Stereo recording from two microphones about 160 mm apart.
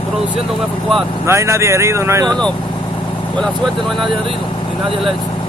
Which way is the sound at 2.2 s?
5° left (ahead or behind).